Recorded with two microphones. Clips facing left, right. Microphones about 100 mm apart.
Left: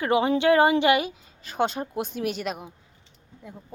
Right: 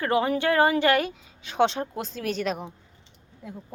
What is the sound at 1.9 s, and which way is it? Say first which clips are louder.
A woman's voice: left 1 dB; 15° left (ahead or behind).